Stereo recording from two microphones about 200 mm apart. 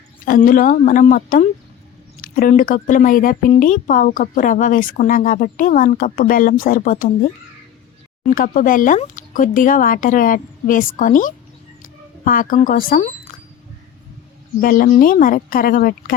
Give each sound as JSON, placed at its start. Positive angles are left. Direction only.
{"t": 0.3, "sound": "speech", "side_deg": 45}
{"t": 8.4, "sound": "speech", "side_deg": 45}
{"t": 14.6, "sound": "speech", "side_deg": 45}